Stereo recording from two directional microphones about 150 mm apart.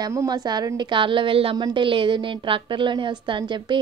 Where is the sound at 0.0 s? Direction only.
25° right (ahead or behind).